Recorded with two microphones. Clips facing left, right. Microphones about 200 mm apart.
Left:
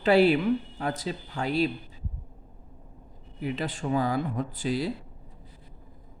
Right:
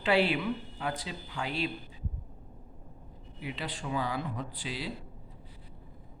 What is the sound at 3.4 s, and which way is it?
Speech, 45° left (ahead or behind).